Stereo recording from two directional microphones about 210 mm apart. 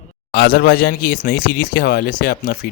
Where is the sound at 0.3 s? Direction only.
50° left (ahead or behind).